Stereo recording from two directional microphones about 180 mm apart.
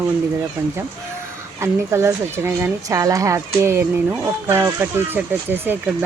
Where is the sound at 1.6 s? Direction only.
15° right (ahead or behind).